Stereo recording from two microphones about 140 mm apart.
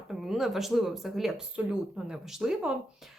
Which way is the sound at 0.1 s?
Centre (ahead or behind).